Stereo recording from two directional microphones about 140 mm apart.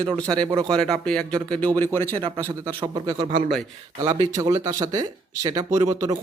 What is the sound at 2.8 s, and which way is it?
Speech, 25° right (ahead or behind).